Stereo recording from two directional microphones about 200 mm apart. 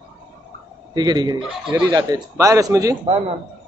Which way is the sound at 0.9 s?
20° right (ahead or behind).